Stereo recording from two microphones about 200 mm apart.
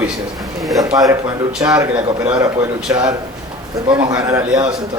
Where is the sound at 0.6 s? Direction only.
Centre (ahead or behind).